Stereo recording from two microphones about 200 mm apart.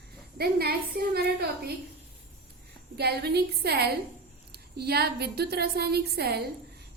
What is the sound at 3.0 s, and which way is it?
A woman's voice, 55° right (ahead or behind).